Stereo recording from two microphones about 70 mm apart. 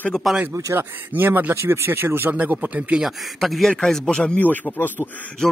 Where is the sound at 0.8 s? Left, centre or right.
Right.